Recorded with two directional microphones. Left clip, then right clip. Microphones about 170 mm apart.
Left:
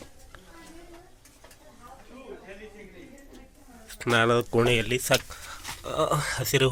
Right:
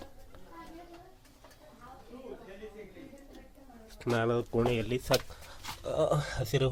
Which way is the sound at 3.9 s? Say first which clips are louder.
Left 8 dB; 5° left (ahead or behind).